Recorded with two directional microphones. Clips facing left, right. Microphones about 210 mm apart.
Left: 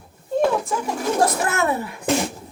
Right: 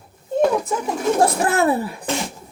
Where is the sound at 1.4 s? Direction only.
35° right (ahead or behind).